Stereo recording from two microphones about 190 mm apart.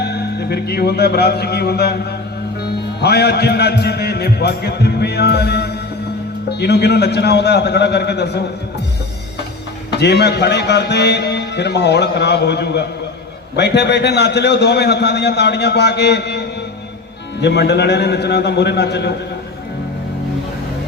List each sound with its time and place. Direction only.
0.0 s speech: 60° left (ahead or behind)
3.0 s speech: 60° left (ahead or behind)
9.9 s speech: 60° left (ahead or behind)
17.4 s speech: 65° left (ahead or behind)